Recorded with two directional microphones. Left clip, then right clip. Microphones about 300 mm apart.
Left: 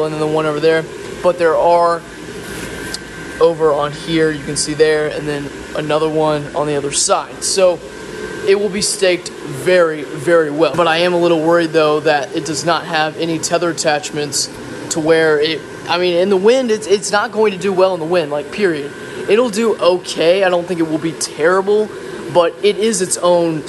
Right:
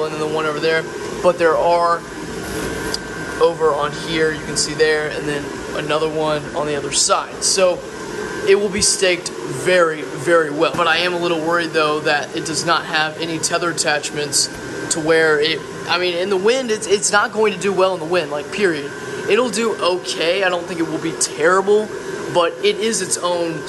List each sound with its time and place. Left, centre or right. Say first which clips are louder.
0.0 s speech: left 4 dB; centre
3.3 s speech: left 3 dB; centre
8.5 s speech: left 1 dB; centre